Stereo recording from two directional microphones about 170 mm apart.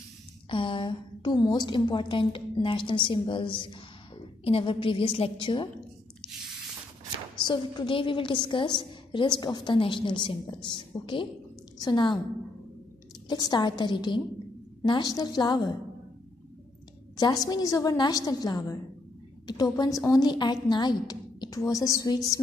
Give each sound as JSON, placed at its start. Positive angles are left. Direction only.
{"t": 0.5, "sound": "a woman's voice", "side_deg": 30}
{"t": 7.3, "sound": "a woman's voice", "side_deg": 30}
{"t": 13.3, "sound": "a woman's voice", "side_deg": 25}
{"t": 17.2, "sound": "a woman's voice", "side_deg": 20}